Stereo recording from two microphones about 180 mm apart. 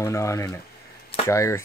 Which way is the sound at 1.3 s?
15° left (ahead or behind).